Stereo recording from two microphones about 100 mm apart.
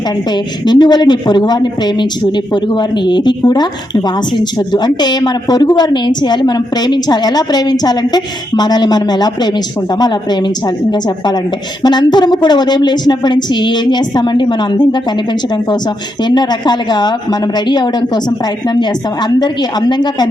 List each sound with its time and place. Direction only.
0.3 s a woman's voice: 45° left (ahead or behind)
11.8 s a woman's voice: 45° left (ahead or behind)
16.2 s a woman's voice: 45° left (ahead or behind)